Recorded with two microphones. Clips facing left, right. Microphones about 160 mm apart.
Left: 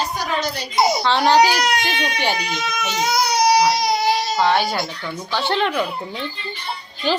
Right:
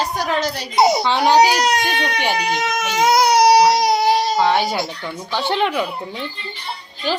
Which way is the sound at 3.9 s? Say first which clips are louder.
Right 3 dB; 55° right (ahead or behind).